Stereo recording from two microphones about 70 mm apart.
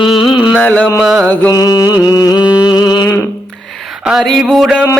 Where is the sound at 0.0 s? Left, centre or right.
Centre.